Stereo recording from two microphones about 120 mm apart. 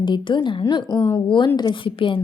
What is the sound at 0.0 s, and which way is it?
Speech, 40° left (ahead or behind).